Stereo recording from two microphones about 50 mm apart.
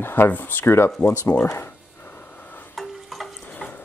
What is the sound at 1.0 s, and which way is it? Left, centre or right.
Speech, left.